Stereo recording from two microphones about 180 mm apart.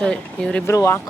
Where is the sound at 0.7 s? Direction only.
15° left (ahead or behind).